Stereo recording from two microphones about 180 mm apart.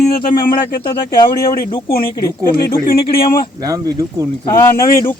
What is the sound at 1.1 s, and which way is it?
Speech, 25° left (ahead or behind).